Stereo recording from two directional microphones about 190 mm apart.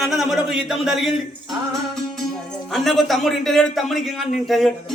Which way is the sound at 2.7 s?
Centre (ahead or behind).